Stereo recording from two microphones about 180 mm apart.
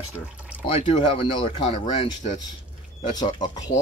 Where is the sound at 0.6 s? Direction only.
30° left (ahead or behind).